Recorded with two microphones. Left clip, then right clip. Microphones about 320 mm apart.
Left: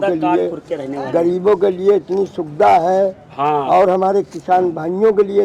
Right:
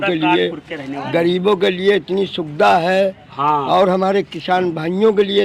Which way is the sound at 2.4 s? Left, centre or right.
Right.